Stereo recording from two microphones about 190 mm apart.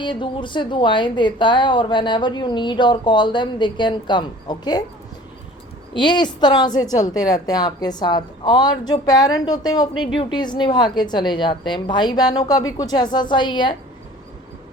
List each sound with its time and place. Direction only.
0.0 s a woman's voice: 25° left (ahead or behind)
5.9 s a woman's voice: 25° left (ahead or behind)